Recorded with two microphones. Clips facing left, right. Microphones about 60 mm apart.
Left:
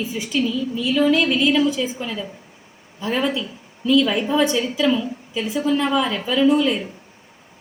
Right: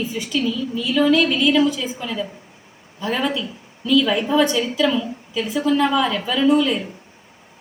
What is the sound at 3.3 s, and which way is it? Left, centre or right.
A woman's voice, centre.